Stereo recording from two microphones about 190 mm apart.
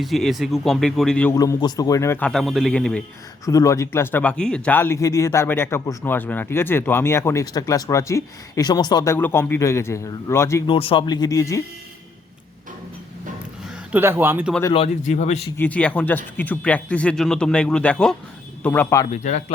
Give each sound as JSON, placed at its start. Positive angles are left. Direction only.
{"t": 0.0, "sound": "speech", "side_deg": 0}
{"t": 1.3, "sound": "speech", "side_deg": 15}
{"t": 3.4, "sound": "speech", "side_deg": 15}
{"t": 10.7, "sound": "speech", "side_deg": 30}
{"t": 13.9, "sound": "speech", "side_deg": -10}
{"t": 14.7, "sound": "speech", "side_deg": 35}
{"t": 15.5, "sound": "speech", "side_deg": 10}
{"t": 19.0, "sound": "speech", "side_deg": 40}